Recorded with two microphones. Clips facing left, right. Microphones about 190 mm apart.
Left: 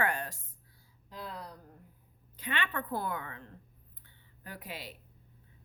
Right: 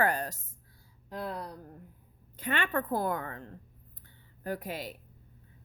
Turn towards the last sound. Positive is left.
turn(degrees=-45)  # may be behind; listen again after turning